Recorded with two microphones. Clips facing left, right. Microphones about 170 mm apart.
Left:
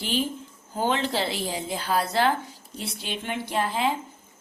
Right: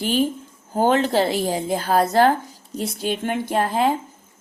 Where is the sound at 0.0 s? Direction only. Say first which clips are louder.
Right 7 dB; 50° right (ahead or behind).